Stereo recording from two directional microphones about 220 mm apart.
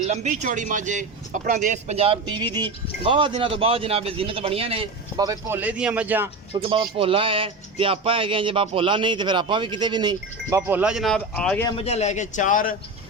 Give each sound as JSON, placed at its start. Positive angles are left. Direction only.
{"t": 0.1, "sound": "speech", "side_deg": -30}
{"t": 6.5, "sound": "speech", "side_deg": -25}
{"t": 11.8, "sound": "a man's voice", "side_deg": 30}